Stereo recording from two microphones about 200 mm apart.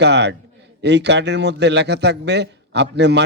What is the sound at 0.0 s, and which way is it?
A man's voice, 60° right (ahead or behind).